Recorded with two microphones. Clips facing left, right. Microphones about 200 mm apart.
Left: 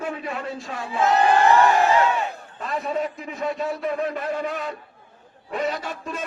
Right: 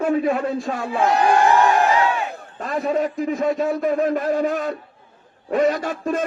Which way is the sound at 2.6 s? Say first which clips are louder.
Right 5 dB; 50° right (ahead or behind).